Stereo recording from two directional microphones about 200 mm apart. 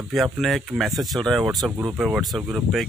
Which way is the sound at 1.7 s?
15° right (ahead or behind).